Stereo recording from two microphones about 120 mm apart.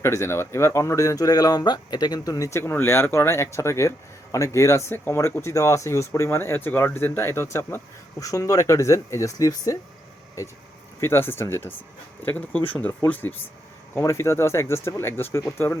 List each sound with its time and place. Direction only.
0.0 s speech: 25° left (ahead or behind)
13.9 s speech: 25° left (ahead or behind)